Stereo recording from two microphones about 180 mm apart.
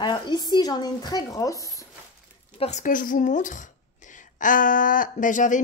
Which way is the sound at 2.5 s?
40° left (ahead or behind).